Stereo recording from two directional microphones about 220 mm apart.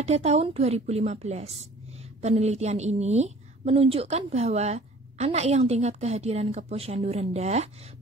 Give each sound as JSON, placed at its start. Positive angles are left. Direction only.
{"t": 0.0, "sound": "a woman's voice", "side_deg": -30}